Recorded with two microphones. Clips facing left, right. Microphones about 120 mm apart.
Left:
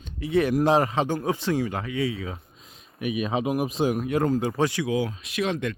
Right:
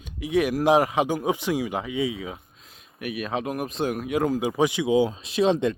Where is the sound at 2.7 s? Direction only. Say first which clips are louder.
Left 3 dB; centre (ahead or behind).